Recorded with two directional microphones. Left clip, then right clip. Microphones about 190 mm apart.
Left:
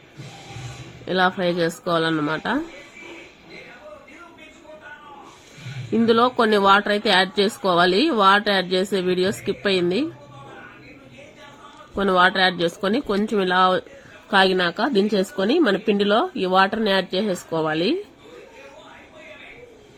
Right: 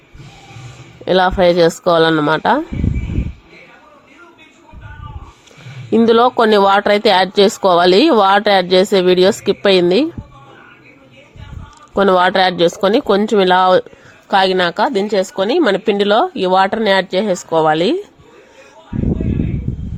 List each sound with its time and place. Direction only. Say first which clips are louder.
1.0 s a woman's voice: right 9 dB; 35° right (ahead or behind)
5.9 s a woman's voice: right 7 dB; 35° right (ahead or behind)
11.9 s a woman's voice: right 6 dB; 35° right (ahead or behind)